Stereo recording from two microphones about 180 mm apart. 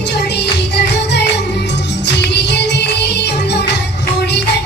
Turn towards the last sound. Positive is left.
turn(degrees=70)  # may be behind; listen again after turning